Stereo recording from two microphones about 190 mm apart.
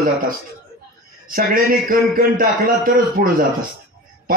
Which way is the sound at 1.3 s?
50° right (ahead or behind).